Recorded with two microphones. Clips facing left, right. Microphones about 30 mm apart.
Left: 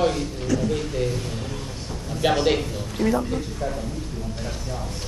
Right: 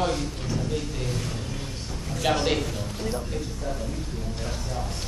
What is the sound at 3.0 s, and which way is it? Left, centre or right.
Speech, left.